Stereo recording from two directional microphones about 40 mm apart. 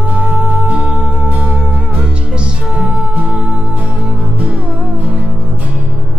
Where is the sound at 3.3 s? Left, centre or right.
Right.